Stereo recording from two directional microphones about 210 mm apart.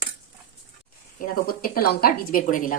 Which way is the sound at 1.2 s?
45° left (ahead or behind).